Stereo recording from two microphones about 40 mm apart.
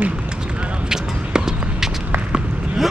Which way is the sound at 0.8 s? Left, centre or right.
Centre.